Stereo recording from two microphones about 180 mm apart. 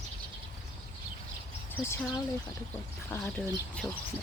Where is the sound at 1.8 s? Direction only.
15° left (ahead or behind).